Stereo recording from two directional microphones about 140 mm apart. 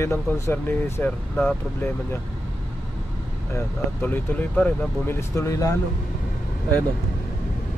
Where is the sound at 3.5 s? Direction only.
15° left (ahead or behind).